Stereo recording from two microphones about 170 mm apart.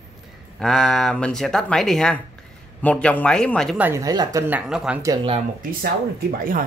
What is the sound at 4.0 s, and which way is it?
Speech, 20° right (ahead or behind).